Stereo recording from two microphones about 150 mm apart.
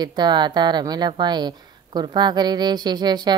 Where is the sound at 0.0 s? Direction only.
30° right (ahead or behind).